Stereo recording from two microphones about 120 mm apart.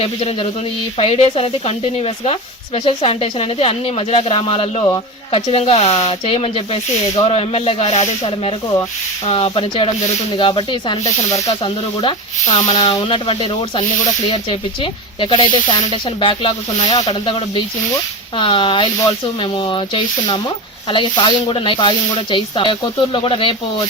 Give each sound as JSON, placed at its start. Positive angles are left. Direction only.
{"t": 0.0, "sound": "speech", "side_deg": 55}
{"t": 10.3, "sound": "speech", "side_deg": 40}
{"t": 12.9, "sound": "speech", "side_deg": 45}